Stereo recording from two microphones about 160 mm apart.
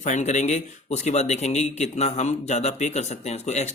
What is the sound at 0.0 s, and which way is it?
Speech, 45° left (ahead or behind).